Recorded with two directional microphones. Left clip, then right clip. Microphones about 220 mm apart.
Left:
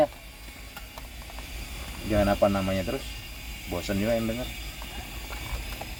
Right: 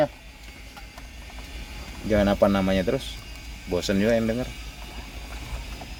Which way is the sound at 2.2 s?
40° right (ahead or behind).